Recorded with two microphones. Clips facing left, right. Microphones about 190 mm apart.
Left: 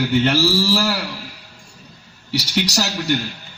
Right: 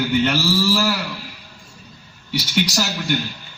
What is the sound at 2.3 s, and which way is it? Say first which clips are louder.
Speech: even; 40° left (ahead or behind).